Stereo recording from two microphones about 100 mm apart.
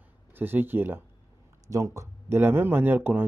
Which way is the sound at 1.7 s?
30° right (ahead or behind).